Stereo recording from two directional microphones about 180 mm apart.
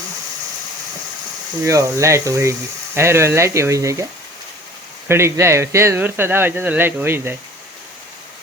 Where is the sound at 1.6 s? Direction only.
15° right (ahead or behind).